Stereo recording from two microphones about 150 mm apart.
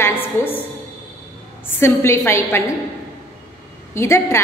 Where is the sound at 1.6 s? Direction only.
15° left (ahead or behind).